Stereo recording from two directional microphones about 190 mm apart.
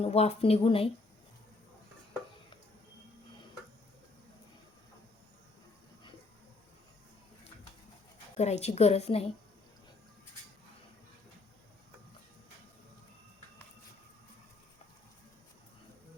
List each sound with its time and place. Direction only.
0.0 s a woman's voice: 35° left (ahead or behind)
8.4 s a woman's voice: 35° left (ahead or behind)